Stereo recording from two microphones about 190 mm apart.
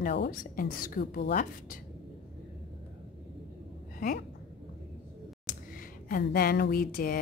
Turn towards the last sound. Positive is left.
turn(degrees=50)  # may be behind; listen again after turning